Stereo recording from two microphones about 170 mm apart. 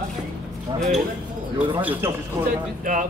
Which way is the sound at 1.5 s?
10° right (ahead or behind).